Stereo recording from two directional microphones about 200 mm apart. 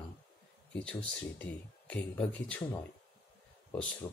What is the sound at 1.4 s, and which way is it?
Speech, 5° left (ahead or behind).